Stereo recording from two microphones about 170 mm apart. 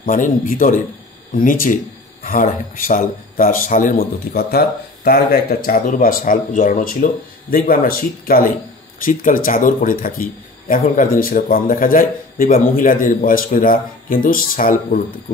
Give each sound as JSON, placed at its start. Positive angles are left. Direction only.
{"t": 0.0, "sound": "a man's voice", "side_deg": 55}